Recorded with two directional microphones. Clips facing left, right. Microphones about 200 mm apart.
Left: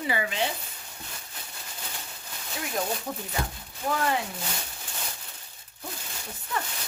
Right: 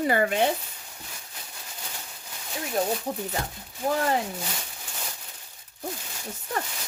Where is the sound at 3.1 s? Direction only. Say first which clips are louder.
Right 2 dB; 35° right (ahead or behind).